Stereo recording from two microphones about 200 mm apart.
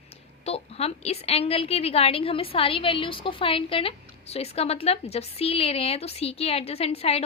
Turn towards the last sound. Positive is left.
turn(degrees=30)  # may be behind; listen again after turning